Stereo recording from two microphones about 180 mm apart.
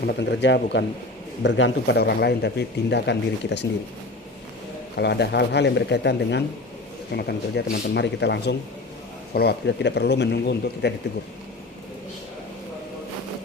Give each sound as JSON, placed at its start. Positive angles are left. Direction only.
{"t": 0.0, "sound": "speech", "side_deg": 65}
{"t": 4.9, "sound": "speech", "side_deg": 70}